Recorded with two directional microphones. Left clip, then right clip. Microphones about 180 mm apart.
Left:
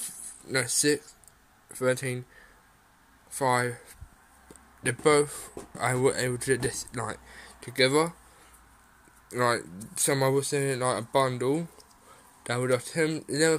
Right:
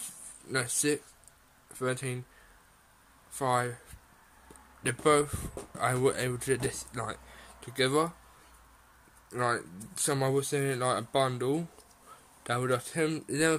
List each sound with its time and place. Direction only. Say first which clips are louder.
0.5 s speech: left 4 dB; 5° left (ahead or behind)
3.3 s speech: left 3 dB; 10° left (ahead or behind)
4.8 s speech: left 3 dB; 5° left (ahead or behind)
9.3 s speech: left 4 dB; 10° left (ahead or behind)